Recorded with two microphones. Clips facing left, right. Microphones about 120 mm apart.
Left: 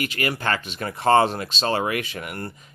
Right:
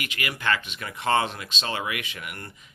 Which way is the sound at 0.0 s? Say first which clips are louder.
Left 5 dB; 40° left (ahead or behind).